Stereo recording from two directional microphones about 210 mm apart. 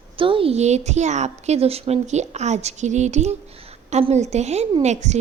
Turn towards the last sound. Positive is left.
turn(degrees=-35)  # may be behind; listen again after turning